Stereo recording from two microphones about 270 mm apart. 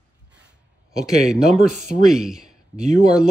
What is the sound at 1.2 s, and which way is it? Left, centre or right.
Speech, centre.